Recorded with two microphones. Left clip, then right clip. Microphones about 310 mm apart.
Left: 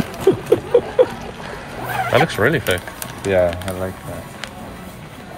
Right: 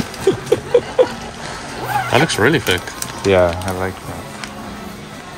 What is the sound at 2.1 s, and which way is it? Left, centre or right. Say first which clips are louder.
Speech: right 1 dB; centre.